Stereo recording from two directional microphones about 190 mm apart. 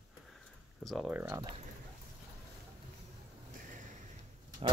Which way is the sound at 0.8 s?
Centre (ahead or behind).